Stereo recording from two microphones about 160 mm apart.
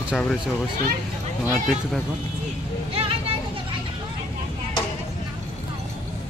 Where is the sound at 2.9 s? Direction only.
35° right (ahead or behind).